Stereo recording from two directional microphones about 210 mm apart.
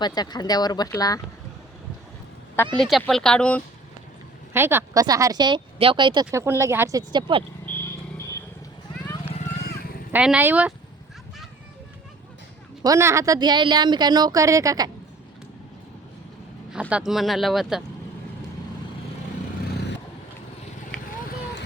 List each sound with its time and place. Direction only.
0.0 s speech: 20° left (ahead or behind)
2.7 s speech: centre (ahead or behind)
4.5 s speech: 10° right (ahead or behind)
7.6 s a sound: 10° left (ahead or behind)
9.3 s vehicle: 35° left (ahead or behind)
10.1 s speech: 5° right (ahead or behind)
12.8 s speech: 15° right (ahead or behind)
16.9 s speech: centre (ahead or behind)